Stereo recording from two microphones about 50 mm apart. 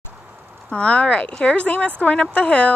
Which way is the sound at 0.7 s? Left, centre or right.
Left.